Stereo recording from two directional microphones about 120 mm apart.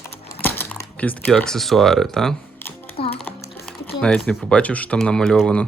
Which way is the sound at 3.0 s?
55° left (ahead or behind).